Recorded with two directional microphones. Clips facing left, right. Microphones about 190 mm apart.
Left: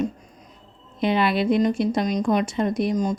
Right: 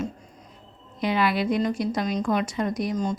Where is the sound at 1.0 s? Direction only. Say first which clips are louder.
Left 3 dB; 25° left (ahead or behind).